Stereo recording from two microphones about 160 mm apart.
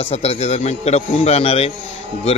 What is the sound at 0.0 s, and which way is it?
A man's voice, 40° left (ahead or behind).